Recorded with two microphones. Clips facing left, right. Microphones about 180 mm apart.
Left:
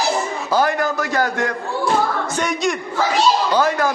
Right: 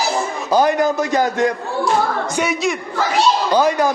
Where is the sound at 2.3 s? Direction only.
5° right (ahead or behind).